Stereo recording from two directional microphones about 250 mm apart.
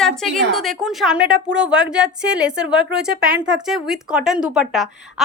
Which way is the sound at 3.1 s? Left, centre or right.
Right.